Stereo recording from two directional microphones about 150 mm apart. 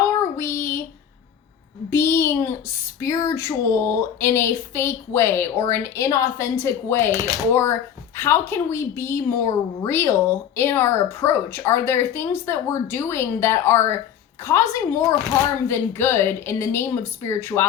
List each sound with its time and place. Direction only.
0.3 s child singing: 15° left (ahead or behind)
1.9 s a sound: 15° left (ahead or behind)
3.0 s speech: 20° left (ahead or behind)
7.1 s speech: 25° right (ahead or behind)
7.5 s speech: 15° left (ahead or behind)